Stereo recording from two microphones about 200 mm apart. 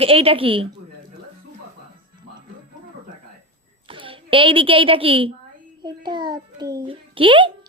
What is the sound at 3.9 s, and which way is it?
A woman's voice, 25° right (ahead or behind).